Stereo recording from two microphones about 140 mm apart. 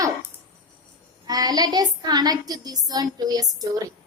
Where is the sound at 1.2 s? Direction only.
25° right (ahead or behind).